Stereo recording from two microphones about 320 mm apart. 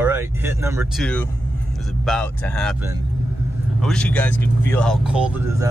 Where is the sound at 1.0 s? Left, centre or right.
Centre.